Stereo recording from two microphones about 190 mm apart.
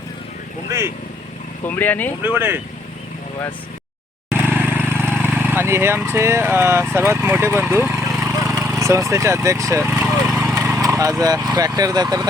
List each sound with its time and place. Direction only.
0.7 s speech: 15° right (ahead or behind)
1.6 s speech: 10° left (ahead or behind)
2.2 s speech: 10° right (ahead or behind)
4.3 s vehicle: 10° right (ahead or behind)
5.1 s speech: 10° right (ahead or behind)
8.2 s a sound: 15° right (ahead or behind)
8.8 s speech: 15° right (ahead or behind)
10.3 s a sound: 15° right (ahead or behind)